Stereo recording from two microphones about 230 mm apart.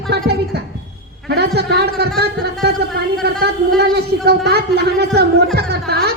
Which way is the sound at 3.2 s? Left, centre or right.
Right.